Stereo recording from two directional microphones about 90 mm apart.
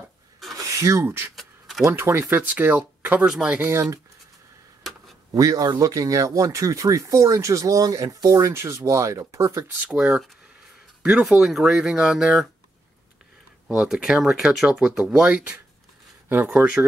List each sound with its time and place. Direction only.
0.7 s speech: 35° right (ahead or behind)
1.3 s a sound: centre (ahead or behind)
1.9 s speech: 25° right (ahead or behind)
3.0 s a sound: 15° right (ahead or behind)
3.3 s speech: 10° right (ahead or behind)
3.6 s speech: 25° right (ahead or behind)
5.3 s speech: 40° right (ahead or behind)
9.8 s speech: 10° right (ahead or behind)
13.7 s speech: 5° right (ahead or behind)
16.3 s speech: 25° right (ahead or behind)